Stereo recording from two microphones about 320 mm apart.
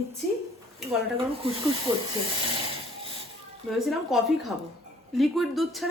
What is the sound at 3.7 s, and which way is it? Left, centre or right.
Speech, centre.